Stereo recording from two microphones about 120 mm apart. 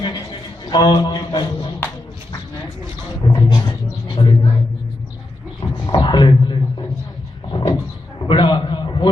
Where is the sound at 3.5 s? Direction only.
35° left (ahead or behind).